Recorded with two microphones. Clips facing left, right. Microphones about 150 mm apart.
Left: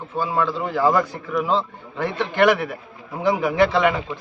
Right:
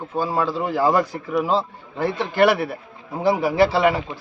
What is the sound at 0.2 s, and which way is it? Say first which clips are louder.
Speech: even; 35° right (ahead or behind).